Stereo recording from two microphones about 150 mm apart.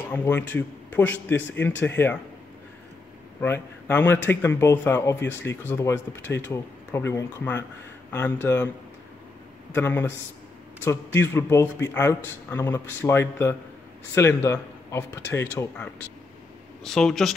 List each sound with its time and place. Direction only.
0.1 s speech: 15° left (ahead or behind)
3.3 s speech: 15° left (ahead or behind)
9.8 s speech: 15° left (ahead or behind)